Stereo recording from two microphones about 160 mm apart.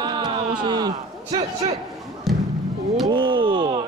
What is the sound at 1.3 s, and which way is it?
Speech, 40° right (ahead or behind).